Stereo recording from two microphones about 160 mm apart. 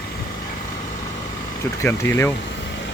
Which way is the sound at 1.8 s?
15° left (ahead or behind).